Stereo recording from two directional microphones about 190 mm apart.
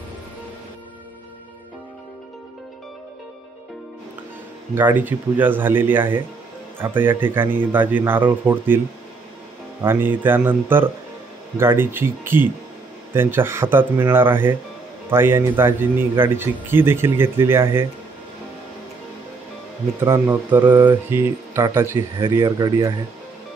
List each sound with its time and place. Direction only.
4.7 s speech: 10° right (ahead or behind)
20.0 s speech: 15° right (ahead or behind)